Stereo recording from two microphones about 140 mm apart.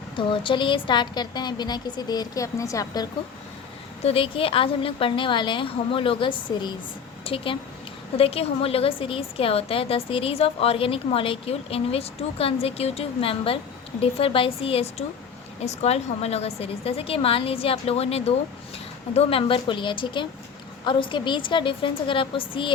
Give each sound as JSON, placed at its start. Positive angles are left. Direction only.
{"t": 0.2, "sound": "a woman's voice", "side_deg": 35}
{"t": 4.0, "sound": "a woman's voice", "side_deg": 40}